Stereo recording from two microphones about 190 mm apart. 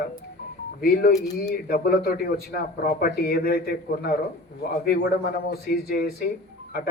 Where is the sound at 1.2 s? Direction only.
20° left (ahead or behind).